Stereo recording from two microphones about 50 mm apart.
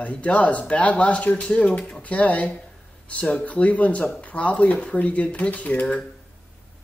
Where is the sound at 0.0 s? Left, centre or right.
Left.